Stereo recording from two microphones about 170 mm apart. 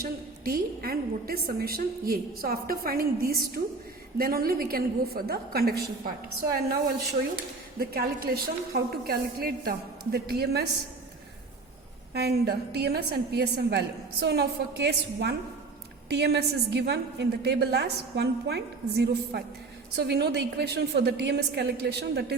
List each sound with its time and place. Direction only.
0.0 s a woman's voice: 60° right (ahead or behind)
12.5 s a woman's voice: 70° right (ahead or behind)